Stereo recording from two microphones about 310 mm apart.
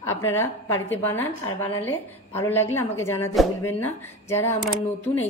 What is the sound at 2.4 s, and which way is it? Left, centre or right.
A woman's voice, centre.